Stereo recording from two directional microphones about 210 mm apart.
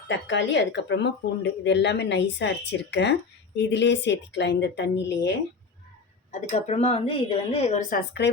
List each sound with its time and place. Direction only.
0.1 s speech: 60° left (ahead or behind)
6.3 s a woman's voice: 30° left (ahead or behind)